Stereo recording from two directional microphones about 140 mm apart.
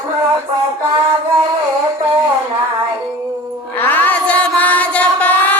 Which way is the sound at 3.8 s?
15° left (ahead or behind).